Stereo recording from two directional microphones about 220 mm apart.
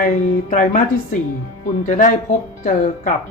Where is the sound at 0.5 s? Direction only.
35° left (ahead or behind).